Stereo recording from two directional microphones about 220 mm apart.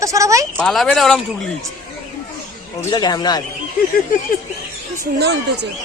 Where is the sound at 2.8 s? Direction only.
15° left (ahead or behind).